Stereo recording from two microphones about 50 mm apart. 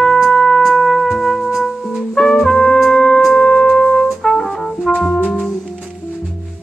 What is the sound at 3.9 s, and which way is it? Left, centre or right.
Brass instrument, centre.